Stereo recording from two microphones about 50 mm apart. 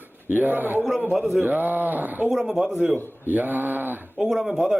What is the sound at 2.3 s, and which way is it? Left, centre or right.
Speech, centre.